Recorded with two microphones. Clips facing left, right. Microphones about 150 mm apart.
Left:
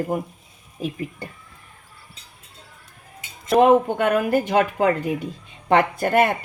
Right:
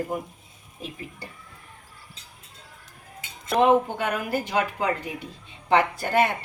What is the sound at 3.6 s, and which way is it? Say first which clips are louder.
A woman's voice: left 4 dB; 50° left (ahead or behind).